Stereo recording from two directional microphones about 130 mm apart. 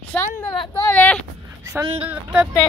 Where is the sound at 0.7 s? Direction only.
15° left (ahead or behind).